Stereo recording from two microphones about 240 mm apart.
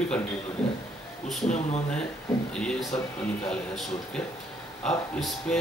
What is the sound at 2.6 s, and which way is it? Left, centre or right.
Speech, centre.